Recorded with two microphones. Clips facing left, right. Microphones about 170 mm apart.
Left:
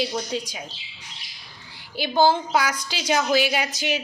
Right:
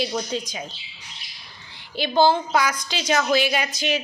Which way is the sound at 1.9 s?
10° left (ahead or behind).